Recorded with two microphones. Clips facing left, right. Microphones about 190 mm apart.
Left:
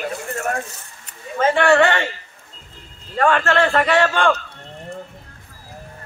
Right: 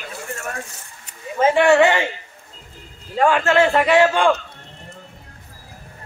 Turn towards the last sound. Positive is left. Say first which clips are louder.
# right 2 dB
turn(degrees=-10)  # may be behind; listen again after turning